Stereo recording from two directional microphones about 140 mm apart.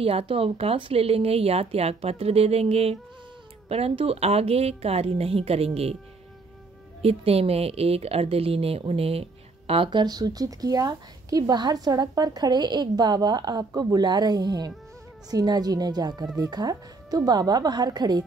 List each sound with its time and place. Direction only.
0.0 s speech: 45° right (ahead or behind)
7.0 s speech: 45° right (ahead or behind); by 18.2 s 30° right (ahead or behind)